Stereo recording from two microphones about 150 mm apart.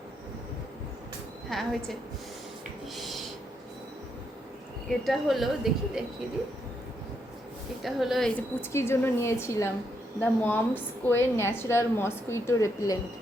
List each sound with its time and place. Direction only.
1.5 s a woman's voice: centre (ahead or behind)
2.9 s a sound: centre (ahead or behind)
4.9 s a woman's voice: centre (ahead or behind)
7.8 s a woman's voice: centre (ahead or behind)
8.4 s a woman's voice: 15° left (ahead or behind)